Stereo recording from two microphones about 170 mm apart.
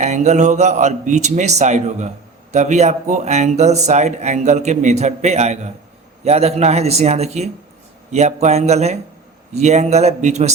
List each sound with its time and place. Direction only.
0.0 s a man's voice: 45° right (ahead or behind)